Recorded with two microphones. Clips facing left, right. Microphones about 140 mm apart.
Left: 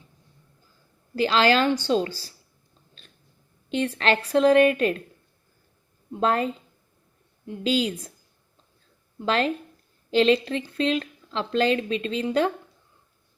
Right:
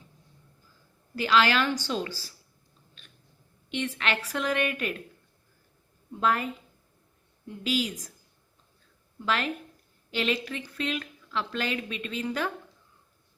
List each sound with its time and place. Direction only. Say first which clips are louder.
1.1 s a woman's voice: left 4 dB; 30° left (ahead or behind)
3.7 s a woman's voice: left 7 dB; 35° left (ahead or behind)
6.1 s a woman's voice: left 4 dB; 30° left (ahead or behind)
9.1 s a woman's voice: left 6 dB; 30° left (ahead or behind)